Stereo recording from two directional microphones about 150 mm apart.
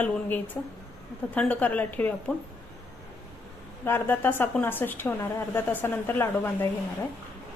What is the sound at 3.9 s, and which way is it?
A woman's voice, 15° left (ahead or behind).